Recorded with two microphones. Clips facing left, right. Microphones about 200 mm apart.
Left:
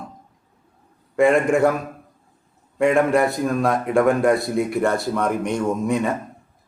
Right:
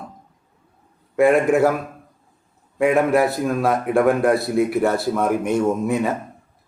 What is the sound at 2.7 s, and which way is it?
Speech, 5° right (ahead or behind).